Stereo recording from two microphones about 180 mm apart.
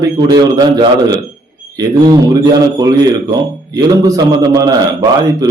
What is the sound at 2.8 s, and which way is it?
A man's voice, 20° right (ahead or behind).